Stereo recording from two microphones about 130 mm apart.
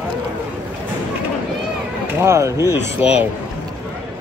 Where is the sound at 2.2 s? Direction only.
20° right (ahead or behind).